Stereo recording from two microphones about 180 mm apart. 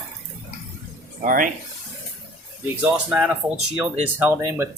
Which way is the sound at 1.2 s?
50° right (ahead or behind).